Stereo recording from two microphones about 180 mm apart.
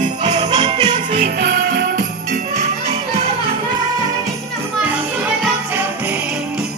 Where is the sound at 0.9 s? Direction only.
50° right (ahead or behind).